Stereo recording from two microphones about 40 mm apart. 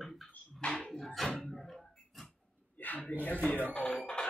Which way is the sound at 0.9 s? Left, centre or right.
Centre.